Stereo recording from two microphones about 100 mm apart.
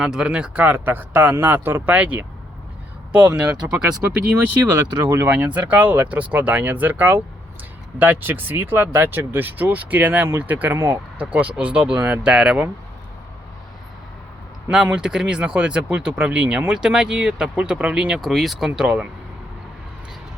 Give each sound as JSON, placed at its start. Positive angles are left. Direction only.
{"t": 0.0, "sound": "speech", "side_deg": -5}
{"t": 5.0, "sound": "speech", "side_deg": -20}
{"t": 11.2, "sound": "speech", "side_deg": -10}
{"t": 14.7, "sound": "speech", "side_deg": -5}